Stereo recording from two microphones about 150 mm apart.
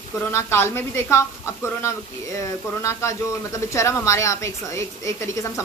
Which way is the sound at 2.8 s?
20° left (ahead or behind).